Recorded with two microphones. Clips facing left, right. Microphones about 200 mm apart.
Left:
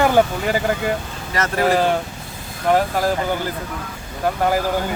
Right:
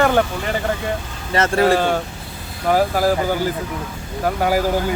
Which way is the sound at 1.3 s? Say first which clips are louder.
Right 4 dB; 30° right (ahead or behind).